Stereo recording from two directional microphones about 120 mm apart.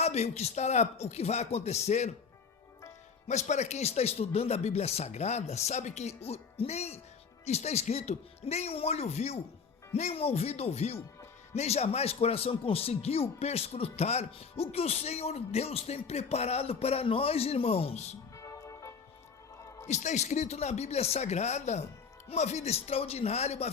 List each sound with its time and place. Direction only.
0.0 s a man's voice: 65° left (ahead or behind)
3.2 s a man's voice: 75° left (ahead or behind)
18.3 s music: 25° left (ahead or behind)
19.9 s a man's voice: 75° left (ahead or behind)